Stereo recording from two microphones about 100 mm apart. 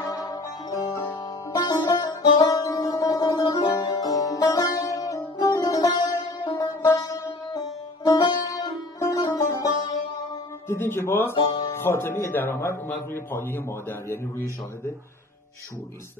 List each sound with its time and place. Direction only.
0.1 s music: 40° left (ahead or behind)
6.5 s sitar: 35° left (ahead or behind)
7.5 s music: 40° left (ahead or behind)
10.7 s a man's voice: 25° left (ahead or behind)